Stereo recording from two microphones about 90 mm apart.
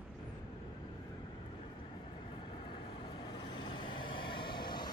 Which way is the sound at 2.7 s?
70° left (ahead or behind).